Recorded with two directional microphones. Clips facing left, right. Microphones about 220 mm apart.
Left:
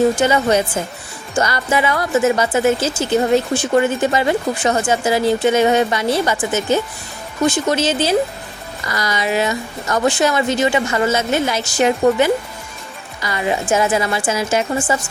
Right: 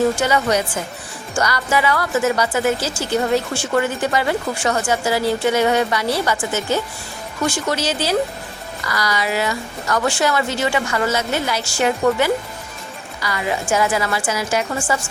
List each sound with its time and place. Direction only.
0.2 s a woman's voice: 25° left (ahead or behind)